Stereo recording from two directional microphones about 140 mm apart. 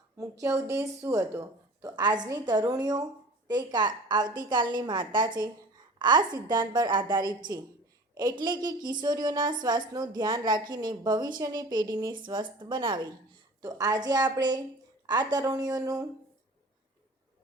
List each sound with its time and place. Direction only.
0.2 s a woman's voice: 20° right (ahead or behind)